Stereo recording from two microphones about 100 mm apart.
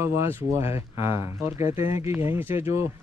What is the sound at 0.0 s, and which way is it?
Speech, 30° right (ahead or behind).